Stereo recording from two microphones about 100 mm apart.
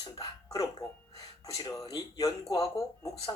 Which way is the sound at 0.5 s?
40° left (ahead or behind).